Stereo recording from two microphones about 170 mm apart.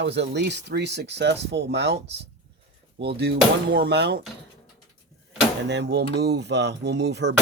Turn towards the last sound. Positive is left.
turn(degrees=-90)